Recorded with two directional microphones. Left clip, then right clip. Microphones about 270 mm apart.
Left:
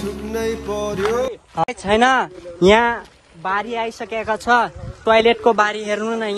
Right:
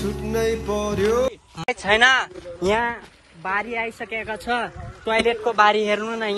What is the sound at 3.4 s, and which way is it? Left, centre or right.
Speech, centre.